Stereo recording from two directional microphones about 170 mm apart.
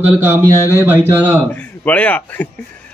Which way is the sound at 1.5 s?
10° left (ahead or behind).